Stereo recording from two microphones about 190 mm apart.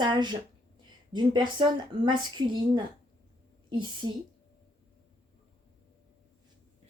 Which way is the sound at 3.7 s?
25° right (ahead or behind).